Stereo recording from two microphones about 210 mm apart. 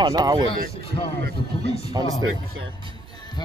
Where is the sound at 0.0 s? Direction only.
20° right (ahead or behind).